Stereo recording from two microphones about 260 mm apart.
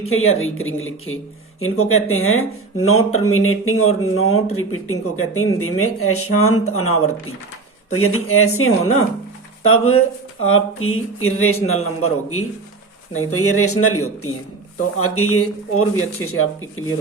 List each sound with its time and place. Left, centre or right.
0.0 s speech: left